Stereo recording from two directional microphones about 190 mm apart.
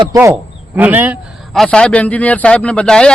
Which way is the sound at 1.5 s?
5° left (ahead or behind).